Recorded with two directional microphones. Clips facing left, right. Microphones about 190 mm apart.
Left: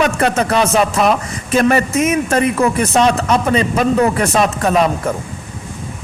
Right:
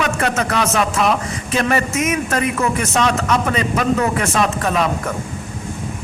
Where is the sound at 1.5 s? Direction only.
40° left (ahead or behind).